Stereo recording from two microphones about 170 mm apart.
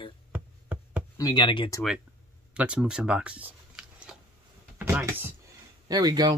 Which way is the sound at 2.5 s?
5° right (ahead or behind).